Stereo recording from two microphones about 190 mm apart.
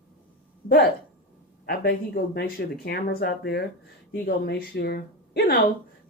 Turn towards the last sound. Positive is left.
turn(degrees=50)  # may be behind; listen again after turning